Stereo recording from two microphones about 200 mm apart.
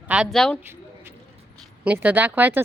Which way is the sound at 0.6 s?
10° right (ahead or behind).